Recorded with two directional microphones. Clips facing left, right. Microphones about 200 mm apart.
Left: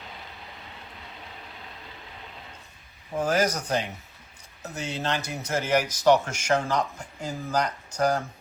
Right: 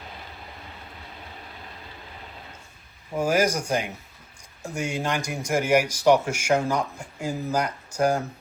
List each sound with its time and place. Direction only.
3.2 s speech: 10° right (ahead or behind)